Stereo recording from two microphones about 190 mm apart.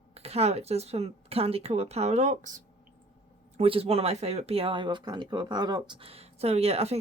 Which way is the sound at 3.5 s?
30° right (ahead or behind).